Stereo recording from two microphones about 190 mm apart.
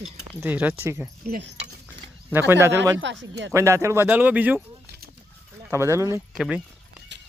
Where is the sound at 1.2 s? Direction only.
55° right (ahead or behind).